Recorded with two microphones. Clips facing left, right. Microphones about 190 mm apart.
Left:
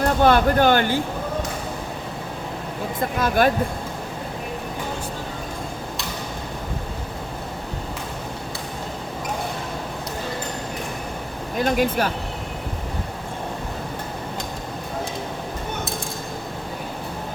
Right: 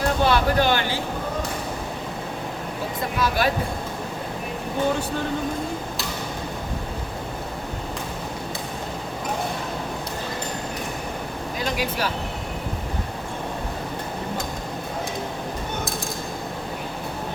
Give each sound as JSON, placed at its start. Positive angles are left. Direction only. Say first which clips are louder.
{"t": 0.2, "sound": "speech", "louder": "left 5 dB", "side_deg": 50}
{"t": 3.2, "sound": "speech", "louder": "left 4 dB", "side_deg": 50}
{"t": 11.5, "sound": "speech", "louder": "left 7 dB", "side_deg": 50}